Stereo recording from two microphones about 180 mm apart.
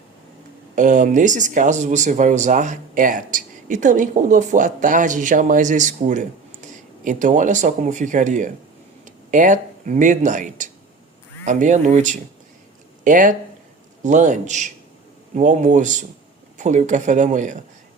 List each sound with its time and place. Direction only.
0.8 s speech: 45° right (ahead or behind)